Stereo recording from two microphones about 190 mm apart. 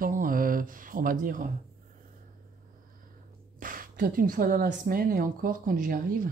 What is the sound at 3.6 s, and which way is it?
Speech, 45° right (ahead or behind).